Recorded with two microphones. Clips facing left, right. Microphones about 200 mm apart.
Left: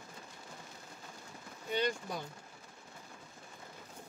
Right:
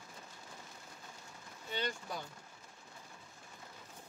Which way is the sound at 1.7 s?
15° left (ahead or behind).